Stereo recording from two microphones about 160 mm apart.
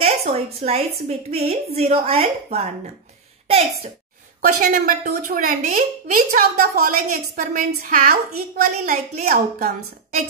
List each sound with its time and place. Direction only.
0.0 s a woman's voice: 40° right (ahead or behind)
4.4 s a woman's voice: 55° right (ahead or behind)
7.3 s a woman's voice: 60° right (ahead or behind)